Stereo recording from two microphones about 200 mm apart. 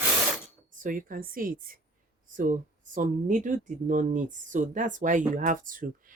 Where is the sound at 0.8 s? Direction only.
40° right (ahead or behind).